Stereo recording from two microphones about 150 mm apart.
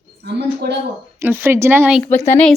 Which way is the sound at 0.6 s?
90° right.